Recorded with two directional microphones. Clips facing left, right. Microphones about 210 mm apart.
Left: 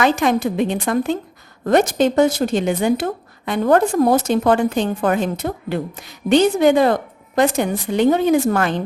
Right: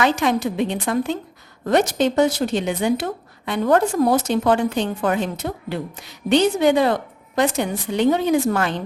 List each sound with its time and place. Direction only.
0.0 s a woman's voice: 50° left (ahead or behind)